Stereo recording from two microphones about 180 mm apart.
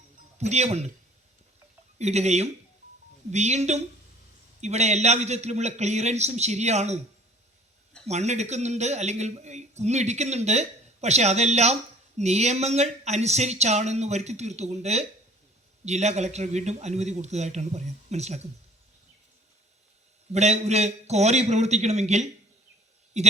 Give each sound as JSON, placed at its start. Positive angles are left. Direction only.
{"t": 0.3, "sound": "speech", "side_deg": -40}
{"t": 2.0, "sound": "speech", "side_deg": -40}
{"t": 8.0, "sound": "speech", "side_deg": -40}
{"t": 20.3, "sound": "speech", "side_deg": -40}